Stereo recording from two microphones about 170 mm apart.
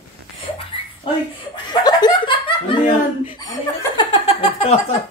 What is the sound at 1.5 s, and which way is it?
Laughter, 25° left (ahead or behind).